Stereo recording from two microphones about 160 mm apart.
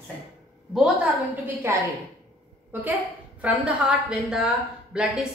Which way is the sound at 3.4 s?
5° right (ahead or behind).